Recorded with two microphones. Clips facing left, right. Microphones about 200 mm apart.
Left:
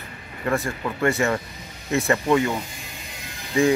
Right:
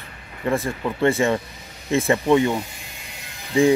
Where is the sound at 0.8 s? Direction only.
25° right (ahead or behind).